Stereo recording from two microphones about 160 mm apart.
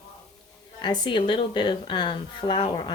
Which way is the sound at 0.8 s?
30° left (ahead or behind).